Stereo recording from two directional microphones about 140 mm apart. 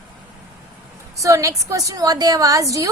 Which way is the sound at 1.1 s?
20° right (ahead or behind).